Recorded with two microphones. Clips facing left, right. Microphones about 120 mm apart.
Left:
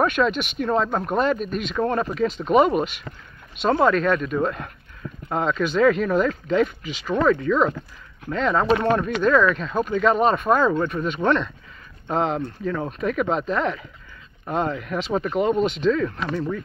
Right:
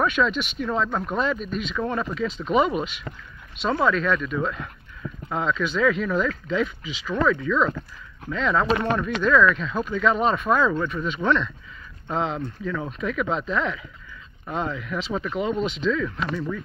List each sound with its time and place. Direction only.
0.0 s speech: 50° left (ahead or behind)